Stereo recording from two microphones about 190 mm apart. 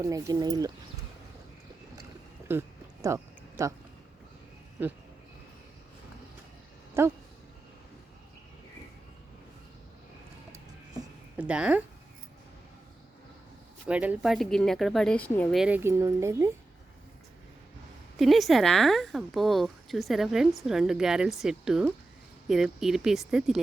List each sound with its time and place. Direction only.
0.0 s speech: 20° right (ahead or behind)
2.5 s music: 15° right (ahead or behind)
3.6 s speech: 15° right (ahead or behind)
7.0 s speech: 15° right (ahead or behind)
11.3 s speech: 5° right (ahead or behind)
13.8 s a woman's voice: 5° right (ahead or behind); by 15.5 s 10° left (ahead or behind)
15.5 s speech: 5° right (ahead or behind)
18.2 s a woman's voice: centre (ahead or behind)